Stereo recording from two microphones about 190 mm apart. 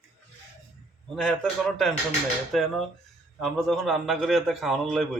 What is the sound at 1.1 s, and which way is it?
Speech, centre (ahead or behind).